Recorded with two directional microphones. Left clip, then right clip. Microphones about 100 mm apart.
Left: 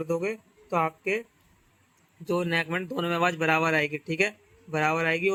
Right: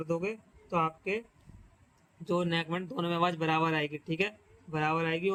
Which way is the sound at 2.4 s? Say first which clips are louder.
Left 5 dB; 30° left (ahead or behind).